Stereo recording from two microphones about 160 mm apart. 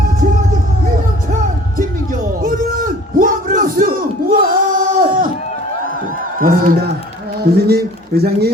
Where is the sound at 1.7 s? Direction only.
55° right (ahead or behind).